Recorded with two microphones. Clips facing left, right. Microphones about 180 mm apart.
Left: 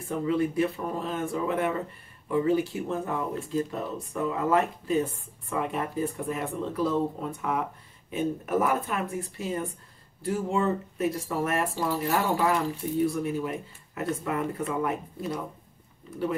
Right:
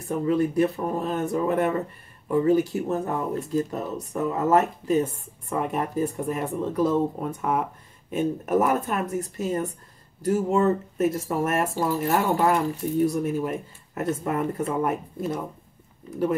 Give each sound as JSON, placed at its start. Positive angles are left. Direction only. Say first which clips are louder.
{"t": 0.3, "sound": "speech", "louder": "right 4 dB", "side_deg": -45}